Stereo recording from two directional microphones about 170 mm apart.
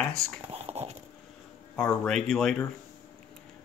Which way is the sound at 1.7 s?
5° left (ahead or behind).